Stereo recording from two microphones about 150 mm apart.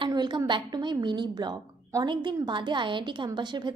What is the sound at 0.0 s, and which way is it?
A woman's voice, 30° right (ahead or behind).